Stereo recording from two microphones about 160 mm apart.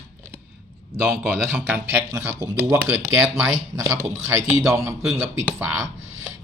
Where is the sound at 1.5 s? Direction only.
10° right (ahead or behind).